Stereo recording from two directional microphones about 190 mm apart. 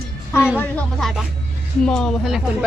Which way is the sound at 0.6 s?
5° left (ahead or behind).